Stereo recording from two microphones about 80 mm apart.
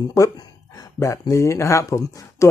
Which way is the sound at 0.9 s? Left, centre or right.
Left.